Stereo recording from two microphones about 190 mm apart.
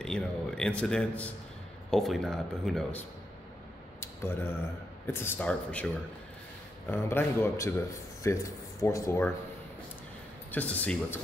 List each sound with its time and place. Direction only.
0.0 s speech: 5° left (ahead or behind)
4.0 s a sound: 10° left (ahead or behind)
5.0 s speech: 10° left (ahead or behind)
6.9 s speech: 10° left (ahead or behind)
10.5 s speech: 10° left (ahead or behind)